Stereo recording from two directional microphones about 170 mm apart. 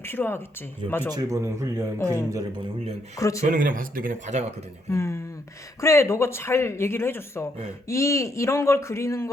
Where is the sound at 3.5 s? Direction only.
55° right (ahead or behind).